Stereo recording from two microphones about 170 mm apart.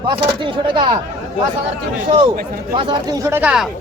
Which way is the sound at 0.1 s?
30° right (ahead or behind).